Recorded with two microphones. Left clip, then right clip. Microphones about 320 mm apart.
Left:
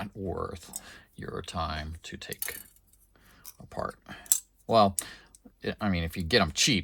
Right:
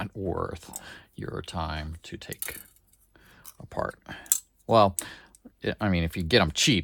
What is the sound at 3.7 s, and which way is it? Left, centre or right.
Speech, right.